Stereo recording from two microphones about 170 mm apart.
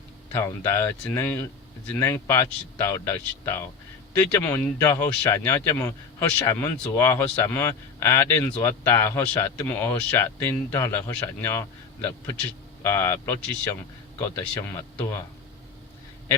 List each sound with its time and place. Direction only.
0.3 s speech: 15° left (ahead or behind)
12.0 s speech: 15° left (ahead or behind)